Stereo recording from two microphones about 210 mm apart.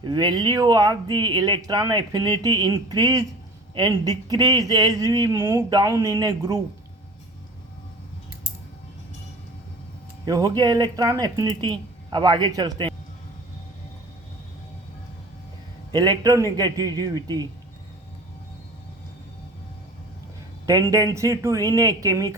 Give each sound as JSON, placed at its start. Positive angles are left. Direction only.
{"t": 0.0, "sound": "speech", "side_deg": -20}
{"t": 10.2, "sound": "speech", "side_deg": -15}
{"t": 15.9, "sound": "speech", "side_deg": -20}
{"t": 20.7, "sound": "speech", "side_deg": -15}